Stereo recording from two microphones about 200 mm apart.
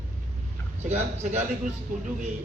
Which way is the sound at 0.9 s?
35° right (ahead or behind).